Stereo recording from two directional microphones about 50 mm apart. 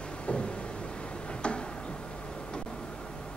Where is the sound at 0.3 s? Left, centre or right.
Left.